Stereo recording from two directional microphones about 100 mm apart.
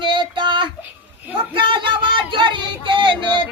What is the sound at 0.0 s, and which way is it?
Child singing, 50° right (ahead or behind).